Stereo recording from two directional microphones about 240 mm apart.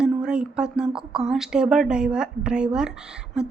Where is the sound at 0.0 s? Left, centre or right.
Centre.